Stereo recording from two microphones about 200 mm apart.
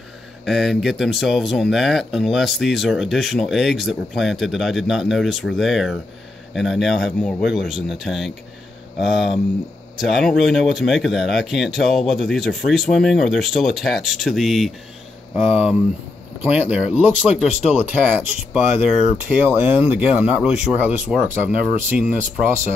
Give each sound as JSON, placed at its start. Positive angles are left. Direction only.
{"t": 0.5, "sound": "speech", "side_deg": 0}